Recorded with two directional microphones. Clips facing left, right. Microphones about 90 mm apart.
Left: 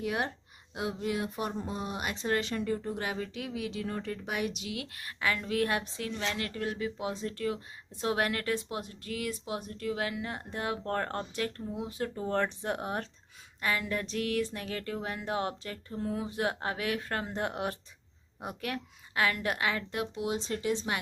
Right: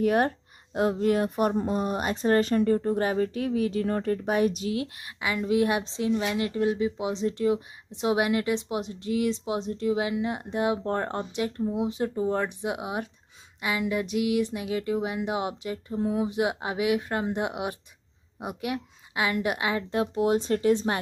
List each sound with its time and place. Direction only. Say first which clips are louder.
0.0 s speech: right 10 dB; 50° right (ahead or behind)
4.8 s a woman's voice: right 1 dB; 20° right (ahead or behind)
20.2 s speech: right 12 dB; 50° right (ahead or behind)